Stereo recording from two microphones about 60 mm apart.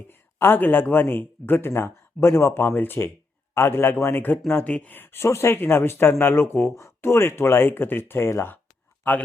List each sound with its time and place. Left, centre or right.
0.1 s speech: left